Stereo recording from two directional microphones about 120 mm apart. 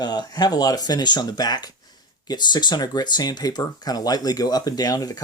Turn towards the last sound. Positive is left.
turn(degrees=30)  # may be behind; listen again after turning